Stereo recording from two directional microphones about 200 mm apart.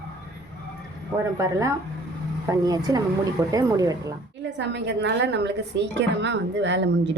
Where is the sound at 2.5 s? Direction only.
20° right (ahead or behind).